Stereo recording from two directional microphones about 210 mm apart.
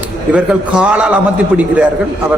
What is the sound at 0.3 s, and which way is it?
A man's voice, 5° right (ahead or behind).